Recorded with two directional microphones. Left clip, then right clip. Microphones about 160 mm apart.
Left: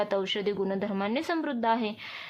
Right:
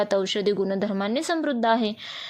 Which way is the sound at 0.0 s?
30° right (ahead or behind).